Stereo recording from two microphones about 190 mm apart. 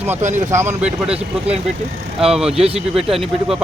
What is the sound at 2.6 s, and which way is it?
Speech, 30° right (ahead or behind).